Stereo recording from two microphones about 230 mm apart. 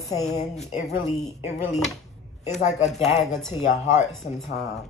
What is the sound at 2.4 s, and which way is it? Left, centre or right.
Speech, left.